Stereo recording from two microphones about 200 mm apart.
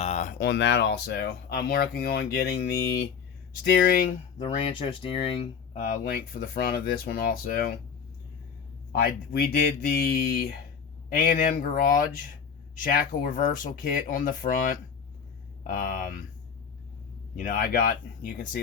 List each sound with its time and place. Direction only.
0.0 s a sound: 35° left (ahead or behind)
0.3 s speech: 60° left (ahead or behind)
4.4 s speech: 25° left (ahead or behind)
5.8 s speech: 45° left (ahead or behind)
9.3 s speech: 50° left (ahead or behind)
17.3 s speech: 45° left (ahead or behind)